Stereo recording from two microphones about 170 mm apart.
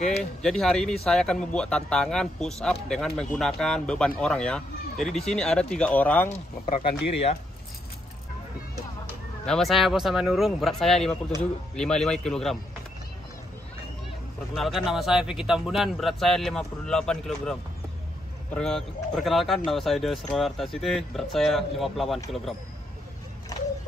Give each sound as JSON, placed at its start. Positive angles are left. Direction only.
{"t": 0.4, "sound": "speech", "side_deg": 0}
{"t": 6.2, "sound": "speech", "side_deg": 35}
{"t": 9.5, "sound": "speech", "side_deg": 0}
{"t": 14.5, "sound": "speech", "side_deg": 0}